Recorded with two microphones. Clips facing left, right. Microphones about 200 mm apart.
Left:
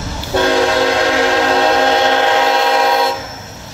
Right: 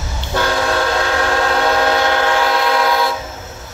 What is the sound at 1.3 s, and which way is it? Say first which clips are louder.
Train: left 3 dB; 25° left (ahead or behind).